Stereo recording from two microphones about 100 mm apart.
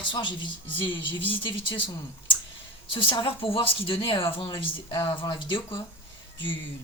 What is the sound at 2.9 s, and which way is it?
Speech, 60° left (ahead or behind).